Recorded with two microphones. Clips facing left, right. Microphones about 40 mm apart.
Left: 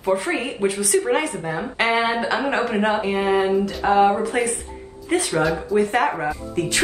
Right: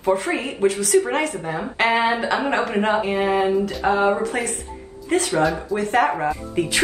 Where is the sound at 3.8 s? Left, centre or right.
Right.